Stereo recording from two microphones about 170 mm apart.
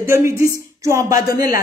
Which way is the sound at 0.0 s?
15° right (ahead or behind).